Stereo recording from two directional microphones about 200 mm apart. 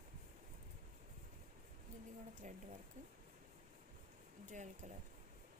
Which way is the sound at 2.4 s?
40° right (ahead or behind).